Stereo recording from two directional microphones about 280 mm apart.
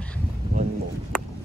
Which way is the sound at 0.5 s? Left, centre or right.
Right.